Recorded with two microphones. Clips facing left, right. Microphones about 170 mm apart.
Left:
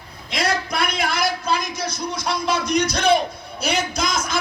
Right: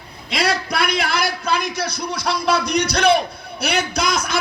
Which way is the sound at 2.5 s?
70° right (ahead or behind).